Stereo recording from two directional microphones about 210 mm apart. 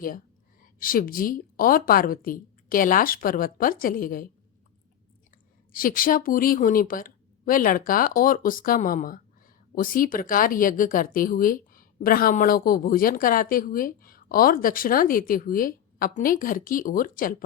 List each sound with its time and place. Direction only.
0.6 s speech: 40° left (ahead or behind)
5.7 s speech: 40° left (ahead or behind)